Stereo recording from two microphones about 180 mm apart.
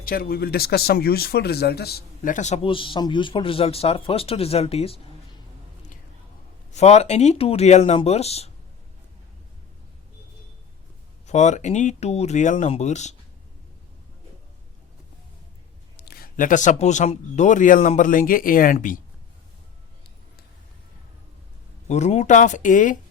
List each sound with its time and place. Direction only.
0.0 s speech: 55° left (ahead or behind); by 4.9 s 35° left (ahead or behind)
6.7 s speech: 40° left (ahead or behind)
11.3 s speech: 40° left (ahead or behind)
16.0 s speech: 55° left (ahead or behind)
21.8 s speech: 40° left (ahead or behind)